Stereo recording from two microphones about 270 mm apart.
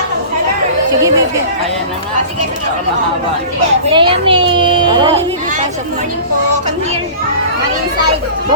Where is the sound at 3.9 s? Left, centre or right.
Centre.